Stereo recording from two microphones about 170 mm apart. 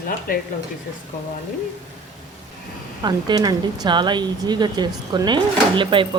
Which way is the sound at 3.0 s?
25° right (ahead or behind).